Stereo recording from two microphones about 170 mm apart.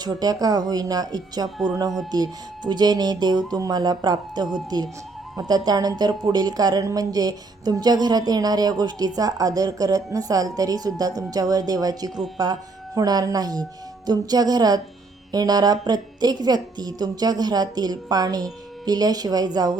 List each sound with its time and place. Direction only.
0.0 s speech: 25° right (ahead or behind)